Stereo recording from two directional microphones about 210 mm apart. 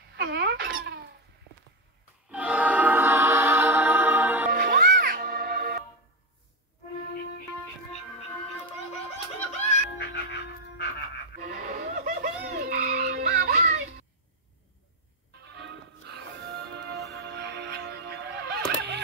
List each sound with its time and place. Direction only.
0.1 s a sound: 50° right (ahead or behind)
2.3 s music: 5° right (ahead or behind)
4.5 s music: 40° right (ahead or behind)
8.2 s a sound: 30° left (ahead or behind)
11.4 s goat: 40° right (ahead or behind)
15.5 s music: 55° right (ahead or behind)